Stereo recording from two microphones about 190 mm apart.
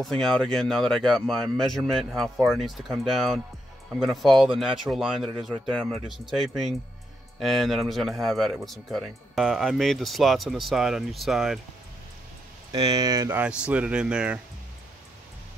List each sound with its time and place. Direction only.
0.0 s speech: centre (ahead or behind)
12.7 s speech: 20° right (ahead or behind)
13.7 s speech: 5° right (ahead or behind)